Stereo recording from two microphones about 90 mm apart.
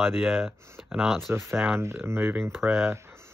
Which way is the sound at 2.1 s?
20° right (ahead or behind).